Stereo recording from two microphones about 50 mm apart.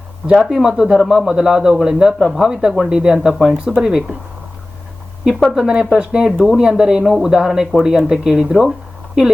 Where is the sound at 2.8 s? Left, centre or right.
Centre.